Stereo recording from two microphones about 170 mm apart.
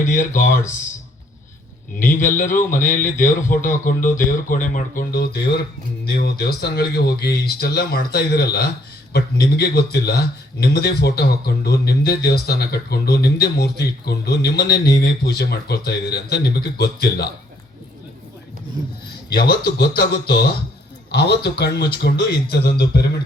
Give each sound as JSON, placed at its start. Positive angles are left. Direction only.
{"t": 0.1, "sound": "speech", "side_deg": 50}
{"t": 2.1, "sound": "speech", "side_deg": 50}
{"t": 19.3, "sound": "speech", "side_deg": 65}